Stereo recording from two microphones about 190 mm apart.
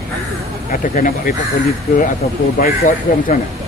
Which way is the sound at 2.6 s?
45° left (ahead or behind).